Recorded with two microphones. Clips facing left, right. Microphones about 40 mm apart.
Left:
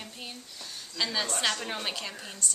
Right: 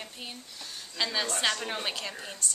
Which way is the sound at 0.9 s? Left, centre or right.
Centre.